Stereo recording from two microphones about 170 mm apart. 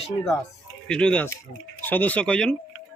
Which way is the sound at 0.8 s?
5° left (ahead or behind).